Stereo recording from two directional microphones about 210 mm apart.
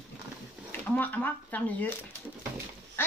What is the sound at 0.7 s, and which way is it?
Speech, 10° left (ahead or behind).